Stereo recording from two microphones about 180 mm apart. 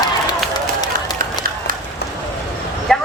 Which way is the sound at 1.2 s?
50° right (ahead or behind).